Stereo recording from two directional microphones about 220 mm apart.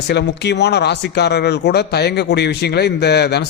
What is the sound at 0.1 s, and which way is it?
Speech, 50° left (ahead or behind).